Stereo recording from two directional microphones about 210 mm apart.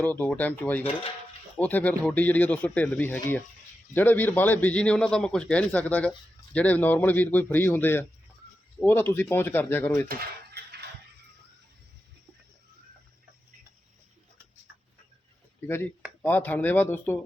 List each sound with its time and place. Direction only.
0.0 s a man's voice: 10° left (ahead or behind)
10.1 s a sound: 50° right (ahead or behind)
15.6 s a man's voice: 10° left (ahead or behind)